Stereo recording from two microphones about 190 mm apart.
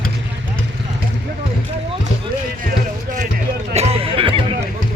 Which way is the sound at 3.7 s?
35° right (ahead or behind).